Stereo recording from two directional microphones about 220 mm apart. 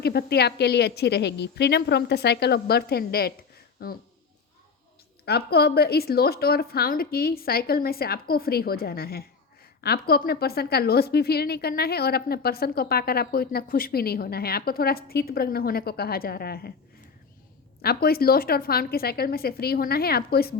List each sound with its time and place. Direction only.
0.0 s a woman's voice: 45° left (ahead or behind)
5.2 s a woman's voice: 45° left (ahead or behind)
17.8 s a woman's voice: 45° left (ahead or behind)